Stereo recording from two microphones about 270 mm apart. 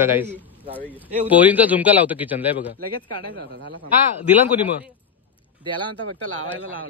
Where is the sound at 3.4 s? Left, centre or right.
Right.